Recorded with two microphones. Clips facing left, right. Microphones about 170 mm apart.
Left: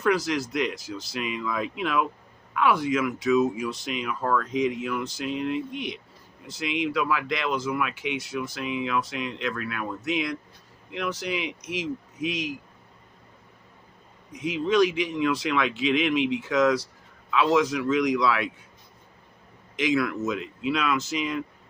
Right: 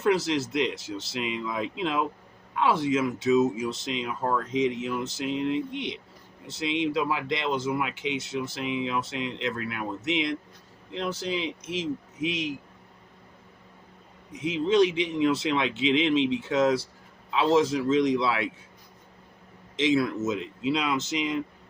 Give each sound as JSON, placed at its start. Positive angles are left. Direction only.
{"t": 0.0, "sound": "speech", "side_deg": -25}
{"t": 14.3, "sound": "speech", "side_deg": -25}
{"t": 19.7, "sound": "speech", "side_deg": -25}